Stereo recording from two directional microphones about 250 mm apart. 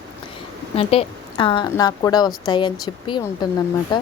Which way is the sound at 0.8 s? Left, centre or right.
Left.